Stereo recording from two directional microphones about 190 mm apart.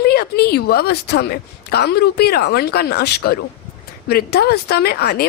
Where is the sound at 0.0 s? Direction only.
55° left (ahead or behind).